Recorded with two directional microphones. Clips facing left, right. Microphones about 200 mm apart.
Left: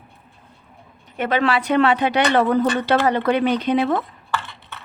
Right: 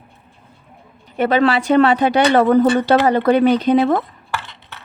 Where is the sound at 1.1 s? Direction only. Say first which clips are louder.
Right 5 dB; 35° right (ahead or behind).